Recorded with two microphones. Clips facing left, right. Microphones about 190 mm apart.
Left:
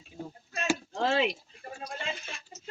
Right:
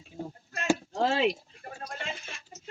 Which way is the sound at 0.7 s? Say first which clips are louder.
Right 2 dB; 40° right (ahead or behind).